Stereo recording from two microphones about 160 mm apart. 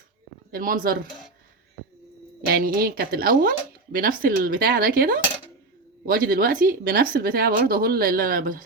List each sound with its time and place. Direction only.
0.5 s speech: 60° right (ahead or behind)
2.5 s speech: 65° right (ahead or behind)